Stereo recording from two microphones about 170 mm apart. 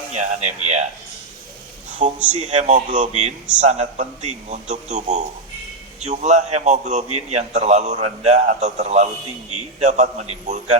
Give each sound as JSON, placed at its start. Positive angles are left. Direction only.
{"t": 0.1, "sound": "a man's voice", "side_deg": -40}
{"t": 2.3, "sound": "a man's voice", "side_deg": -40}